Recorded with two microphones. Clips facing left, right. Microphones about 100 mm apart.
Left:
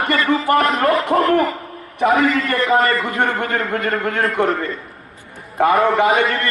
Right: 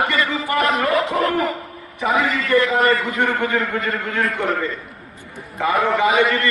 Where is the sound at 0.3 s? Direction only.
55° left (ahead or behind).